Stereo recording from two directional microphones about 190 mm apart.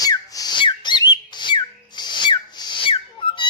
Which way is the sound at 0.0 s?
20° left (ahead or behind).